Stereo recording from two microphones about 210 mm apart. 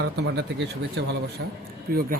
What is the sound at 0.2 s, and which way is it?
Speech, 55° right (ahead or behind).